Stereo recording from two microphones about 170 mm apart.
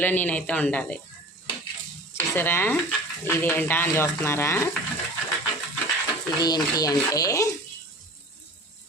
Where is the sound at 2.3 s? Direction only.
10° left (ahead or behind).